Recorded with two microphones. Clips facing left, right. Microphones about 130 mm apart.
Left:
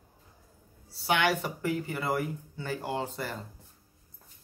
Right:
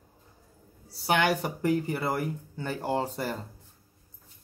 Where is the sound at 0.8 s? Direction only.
40° right (ahead or behind).